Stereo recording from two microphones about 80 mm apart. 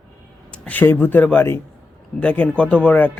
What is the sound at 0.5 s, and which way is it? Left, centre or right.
A man's voice, centre.